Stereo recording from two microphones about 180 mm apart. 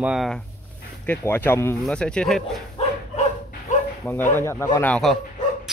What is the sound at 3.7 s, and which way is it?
Bow-wow, 40° left (ahead or behind).